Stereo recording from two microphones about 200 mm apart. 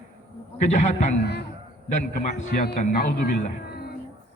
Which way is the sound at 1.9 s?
35° left (ahead or behind).